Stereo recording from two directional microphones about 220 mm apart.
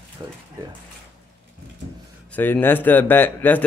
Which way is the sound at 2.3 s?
10° left (ahead or behind).